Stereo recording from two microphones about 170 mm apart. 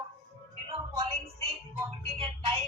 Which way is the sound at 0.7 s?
35° right (ahead or behind).